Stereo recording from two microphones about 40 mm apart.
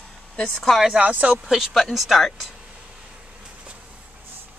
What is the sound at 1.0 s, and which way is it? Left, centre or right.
Speech, right.